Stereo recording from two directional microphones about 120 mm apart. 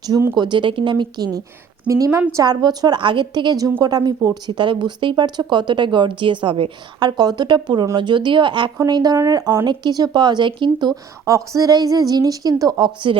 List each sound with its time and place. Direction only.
0.3 s a woman's voice: 40° right (ahead or behind)